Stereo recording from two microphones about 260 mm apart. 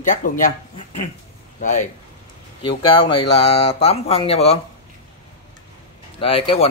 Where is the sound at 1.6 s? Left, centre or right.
Left.